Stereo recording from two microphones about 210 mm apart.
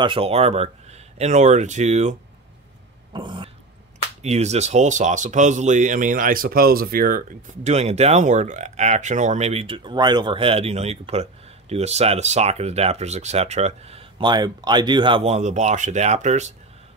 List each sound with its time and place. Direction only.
0.0 s speech: 25° right (ahead or behind)
3.1 s burping: 20° right (ahead or behind)
4.2 s speech: 30° right (ahead or behind)